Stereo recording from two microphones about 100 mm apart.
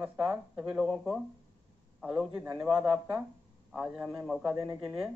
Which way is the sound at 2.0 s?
5° right (ahead or behind).